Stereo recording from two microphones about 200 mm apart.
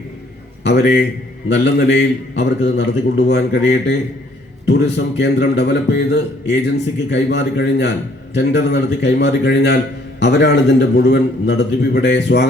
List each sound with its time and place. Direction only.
0.6 s a man's voice: 55° left (ahead or behind)